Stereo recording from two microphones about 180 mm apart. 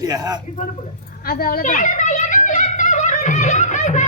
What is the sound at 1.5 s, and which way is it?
Music, 45° left (ahead or behind).